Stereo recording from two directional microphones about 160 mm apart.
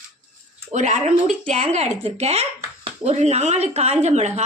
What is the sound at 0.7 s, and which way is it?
Speech, 50° right (ahead or behind).